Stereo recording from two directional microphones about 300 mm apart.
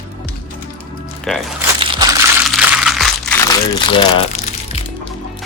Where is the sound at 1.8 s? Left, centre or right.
Centre.